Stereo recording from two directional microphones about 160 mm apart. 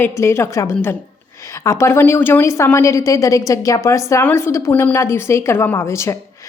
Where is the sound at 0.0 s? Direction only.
15° left (ahead or behind).